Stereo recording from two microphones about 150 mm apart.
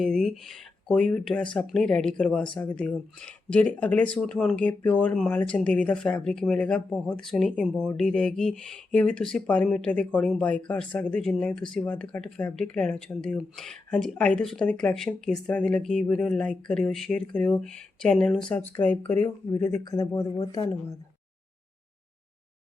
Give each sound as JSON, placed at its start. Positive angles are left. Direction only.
{"t": 0.0, "sound": "speech", "side_deg": 5}